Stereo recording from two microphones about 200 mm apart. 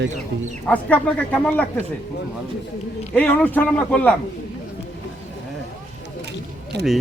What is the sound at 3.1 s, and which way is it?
Speech, 10° left (ahead or behind).